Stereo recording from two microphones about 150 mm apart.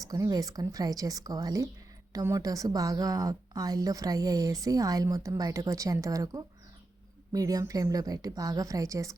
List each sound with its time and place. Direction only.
0.0 s speech: 25° right (ahead or behind)